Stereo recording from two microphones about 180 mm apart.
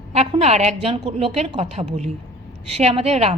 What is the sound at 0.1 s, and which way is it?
A woman's voice, 35° right (ahead or behind).